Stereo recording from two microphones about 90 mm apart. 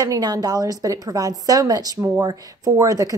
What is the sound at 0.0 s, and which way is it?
A woman's voice, 45° right (ahead or behind).